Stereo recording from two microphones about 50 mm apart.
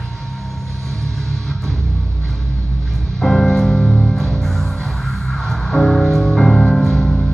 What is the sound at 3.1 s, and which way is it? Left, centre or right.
Music, centre.